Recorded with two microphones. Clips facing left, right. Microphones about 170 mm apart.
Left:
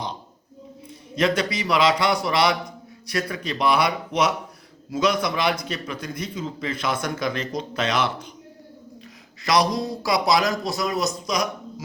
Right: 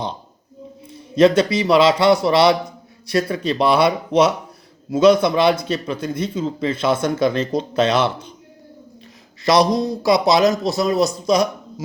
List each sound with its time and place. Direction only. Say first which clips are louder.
1.1 s a man's voice: right 9 dB; 30° right (ahead or behind)
9.4 s a man's voice: right 6 dB; 25° right (ahead or behind)